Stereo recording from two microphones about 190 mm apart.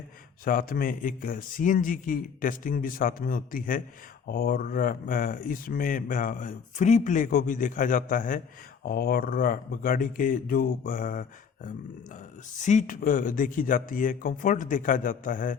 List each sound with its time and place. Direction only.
0.4 s speech: 45° left (ahead or behind)